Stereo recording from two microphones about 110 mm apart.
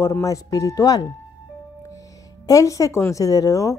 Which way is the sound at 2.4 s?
30° left (ahead or behind).